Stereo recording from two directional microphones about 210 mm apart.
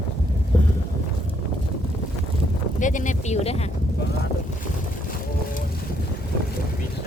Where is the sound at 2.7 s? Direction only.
35° left (ahead or behind).